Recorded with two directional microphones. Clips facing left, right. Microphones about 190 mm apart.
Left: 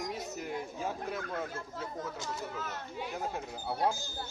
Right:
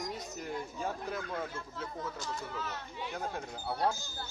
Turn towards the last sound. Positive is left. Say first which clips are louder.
# left 1 dB
turn(degrees=10)  # may be behind; listen again after turning